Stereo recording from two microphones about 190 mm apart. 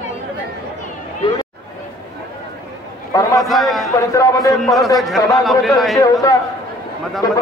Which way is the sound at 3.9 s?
15° left (ahead or behind).